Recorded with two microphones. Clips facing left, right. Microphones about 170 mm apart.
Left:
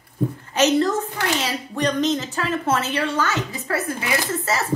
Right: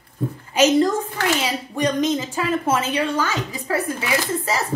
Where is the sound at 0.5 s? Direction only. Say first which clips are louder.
Right 2 dB; 10° right (ahead or behind).